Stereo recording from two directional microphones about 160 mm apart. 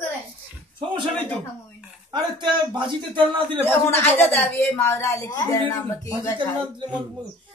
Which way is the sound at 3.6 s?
15° left (ahead or behind).